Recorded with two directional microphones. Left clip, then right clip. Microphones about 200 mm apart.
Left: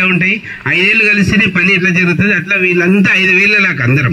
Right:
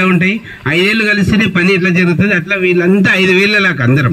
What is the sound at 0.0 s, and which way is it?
A man's voice, 55° right (ahead or behind).